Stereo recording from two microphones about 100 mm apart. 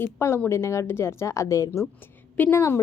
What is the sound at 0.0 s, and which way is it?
A woman's voice, 25° left (ahead or behind).